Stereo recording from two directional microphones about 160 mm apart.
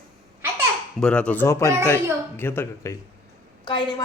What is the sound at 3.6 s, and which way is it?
Speech, 30° left (ahead or behind).